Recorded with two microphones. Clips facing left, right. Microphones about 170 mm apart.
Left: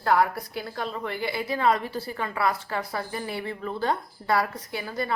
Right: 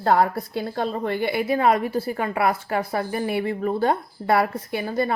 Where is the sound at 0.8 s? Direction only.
50° right (ahead or behind).